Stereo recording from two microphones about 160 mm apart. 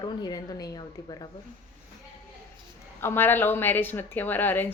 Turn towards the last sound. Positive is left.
turn(degrees=10)  # may be behind; listen again after turning